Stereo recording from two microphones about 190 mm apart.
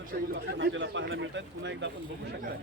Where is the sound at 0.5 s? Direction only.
70° right (ahead or behind).